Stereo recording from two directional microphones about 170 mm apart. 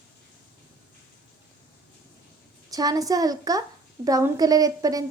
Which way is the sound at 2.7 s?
20° right (ahead or behind).